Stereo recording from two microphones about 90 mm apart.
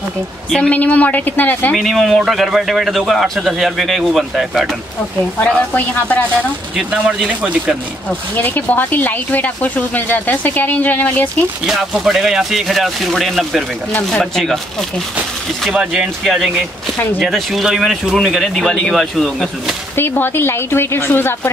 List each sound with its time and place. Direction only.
0.5 s speech: 15° left (ahead or behind)
1.7 s a man's voice: centre (ahead or behind)
5.4 s speech: 15° left (ahead or behind)
7.2 s speech: 15° right (ahead or behind)
8.4 s speech: 20° left (ahead or behind)
11.6 s a man's voice: 5° right (ahead or behind)
15.7 s a man's voice: 10° right (ahead or behind)
20.0 s speech: 25° left (ahead or behind)